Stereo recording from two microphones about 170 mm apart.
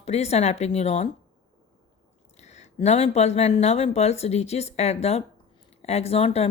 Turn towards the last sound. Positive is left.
turn(degrees=35)  # may be behind; listen again after turning